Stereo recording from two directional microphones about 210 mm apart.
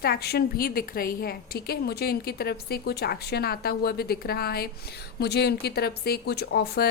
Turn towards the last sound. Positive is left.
turn(degrees=50)  # may be behind; listen again after turning